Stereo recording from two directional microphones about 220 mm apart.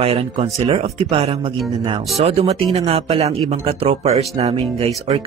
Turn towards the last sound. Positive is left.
turn(degrees=-30)  # may be behind; listen again after turning